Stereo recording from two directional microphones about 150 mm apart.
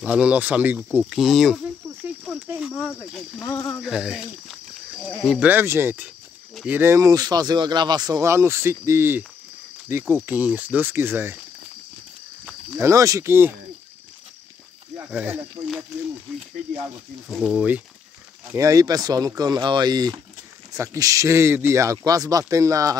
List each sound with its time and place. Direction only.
0.0 s speech: 10° right (ahead or behind)
3.4 s speech: 20° left (ahead or behind)
3.8 s speech: 5° right (ahead or behind)
5.4 s speech: 15° right (ahead or behind)
12.8 s speech: 20° right (ahead or behind)
15.0 s speech: 10° right (ahead or behind)
17.3 s speech: centre (ahead or behind)
18.5 s speech: 20° right (ahead or behind)